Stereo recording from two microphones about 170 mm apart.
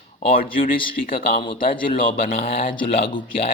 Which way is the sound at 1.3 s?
30° left (ahead or behind).